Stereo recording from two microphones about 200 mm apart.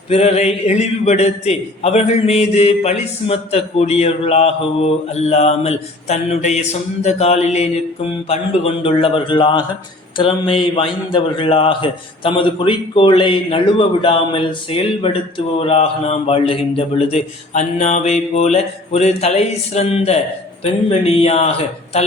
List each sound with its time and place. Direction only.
0.1 s a man's voice: 30° left (ahead or behind)